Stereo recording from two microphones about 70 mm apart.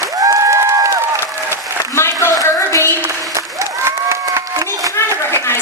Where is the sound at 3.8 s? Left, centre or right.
Right.